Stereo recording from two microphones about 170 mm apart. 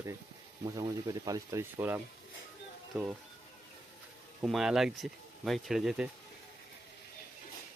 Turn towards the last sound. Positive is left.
turn(degrees=-5)  # may be behind; listen again after turning